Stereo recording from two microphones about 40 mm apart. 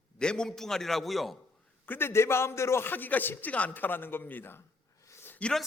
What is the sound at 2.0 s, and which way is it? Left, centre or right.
Speech, left.